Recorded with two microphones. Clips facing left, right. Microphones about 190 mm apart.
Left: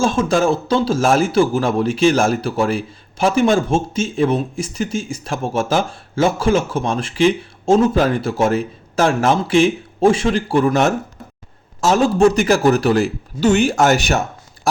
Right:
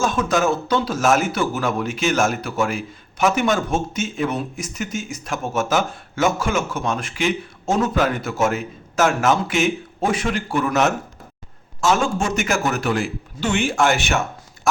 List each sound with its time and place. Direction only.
0.0 s a man's voice: 30° left (ahead or behind)